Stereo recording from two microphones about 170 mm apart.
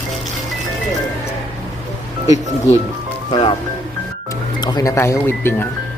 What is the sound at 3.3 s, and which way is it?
Speech, 30° left (ahead or behind).